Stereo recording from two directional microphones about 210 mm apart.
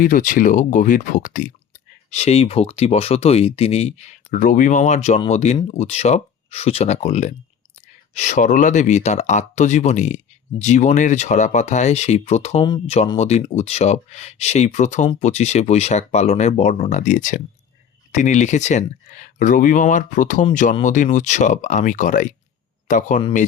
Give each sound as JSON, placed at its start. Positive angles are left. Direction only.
{"t": 0.0, "sound": "speech", "side_deg": 40}